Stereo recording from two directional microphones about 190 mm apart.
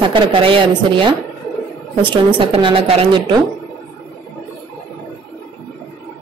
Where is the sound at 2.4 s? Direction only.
30° right (ahead or behind).